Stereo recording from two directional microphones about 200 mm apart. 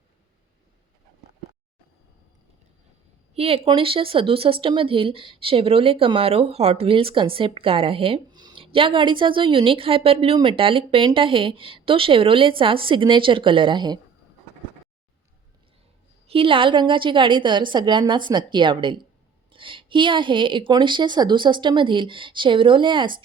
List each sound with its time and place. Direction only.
3.3 s speech: 30° right (ahead or behind)
16.2 s speech: 25° right (ahead or behind)